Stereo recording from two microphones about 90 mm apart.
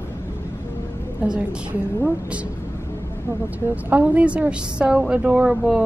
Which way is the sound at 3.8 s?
15° right (ahead or behind).